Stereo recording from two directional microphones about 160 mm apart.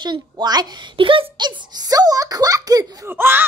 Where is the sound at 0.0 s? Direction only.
25° right (ahead or behind).